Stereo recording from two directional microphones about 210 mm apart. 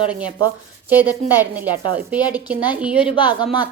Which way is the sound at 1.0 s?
10° right (ahead or behind).